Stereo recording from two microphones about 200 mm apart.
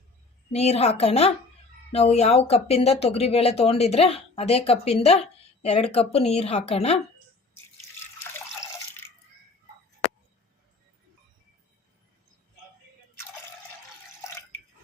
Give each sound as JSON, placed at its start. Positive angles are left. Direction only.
{"t": 0.5, "sound": "speech", "side_deg": 35}
{"t": 8.2, "sound": "water", "side_deg": 15}